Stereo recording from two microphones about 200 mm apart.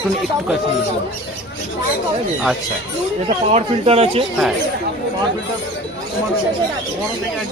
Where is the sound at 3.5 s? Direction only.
30° right (ahead or behind).